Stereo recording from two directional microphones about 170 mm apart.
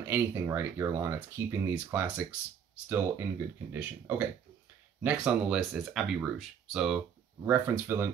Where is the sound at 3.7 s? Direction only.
10° right (ahead or behind).